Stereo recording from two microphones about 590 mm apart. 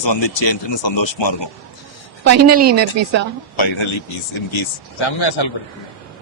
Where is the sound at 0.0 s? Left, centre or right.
Left.